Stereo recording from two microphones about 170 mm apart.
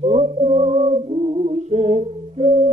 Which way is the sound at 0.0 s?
40° right (ahead or behind).